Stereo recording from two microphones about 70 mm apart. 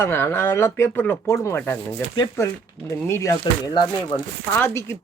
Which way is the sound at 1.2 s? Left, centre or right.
Left.